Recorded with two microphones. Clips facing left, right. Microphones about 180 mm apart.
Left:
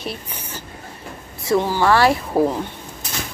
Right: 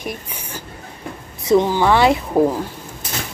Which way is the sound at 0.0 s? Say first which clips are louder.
Right 1 dB; 15° right (ahead or behind).